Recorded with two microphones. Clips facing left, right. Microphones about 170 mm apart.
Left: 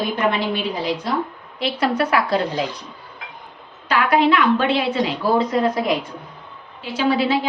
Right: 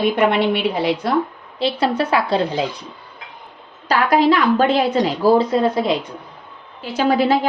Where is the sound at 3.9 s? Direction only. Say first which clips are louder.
Right 2 dB; 35° right (ahead or behind).